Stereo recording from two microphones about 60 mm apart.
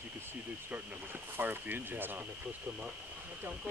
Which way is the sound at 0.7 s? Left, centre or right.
Right.